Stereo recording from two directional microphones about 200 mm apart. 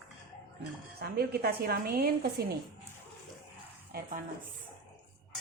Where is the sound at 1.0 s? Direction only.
50° right (ahead or behind).